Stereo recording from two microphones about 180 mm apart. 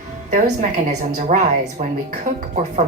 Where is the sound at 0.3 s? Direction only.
40° right (ahead or behind).